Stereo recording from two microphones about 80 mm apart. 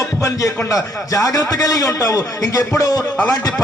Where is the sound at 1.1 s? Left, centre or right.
Left.